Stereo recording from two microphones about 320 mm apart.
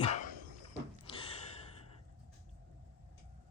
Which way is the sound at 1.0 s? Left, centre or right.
Centre.